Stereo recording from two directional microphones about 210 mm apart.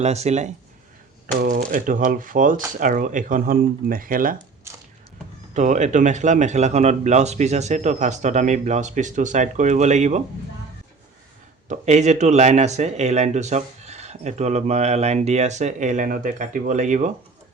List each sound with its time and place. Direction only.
0.0 s speech: 30° right (ahead or behind)
5.5 s speech: 35° right (ahead or behind)
11.7 s speech: 35° right (ahead or behind)